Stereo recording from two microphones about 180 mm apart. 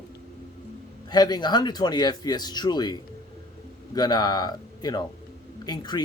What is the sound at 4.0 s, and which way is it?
Speech, 25° left (ahead or behind).